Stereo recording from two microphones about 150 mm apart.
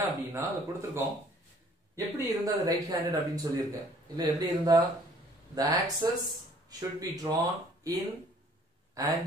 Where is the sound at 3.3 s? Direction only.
25° right (ahead or behind).